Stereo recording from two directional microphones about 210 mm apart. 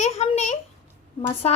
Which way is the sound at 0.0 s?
30° left (ahead or behind).